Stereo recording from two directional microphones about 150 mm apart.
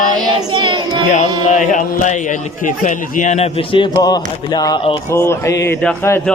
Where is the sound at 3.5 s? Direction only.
35° left (ahead or behind).